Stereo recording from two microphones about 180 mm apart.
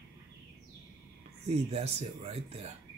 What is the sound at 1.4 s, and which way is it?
Speech, 35° right (ahead or behind).